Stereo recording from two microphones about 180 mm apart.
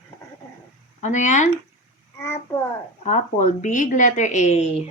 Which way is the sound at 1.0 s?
40° left (ahead or behind).